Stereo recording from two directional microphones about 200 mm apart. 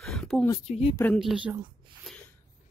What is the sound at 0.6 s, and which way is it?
Speech, 30° left (ahead or behind).